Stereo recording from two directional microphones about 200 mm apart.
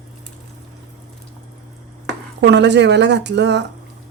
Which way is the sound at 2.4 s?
60° right (ahead or behind).